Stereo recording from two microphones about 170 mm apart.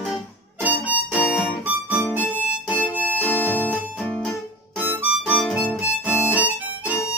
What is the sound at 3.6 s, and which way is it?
Music, 5° left (ahead or behind).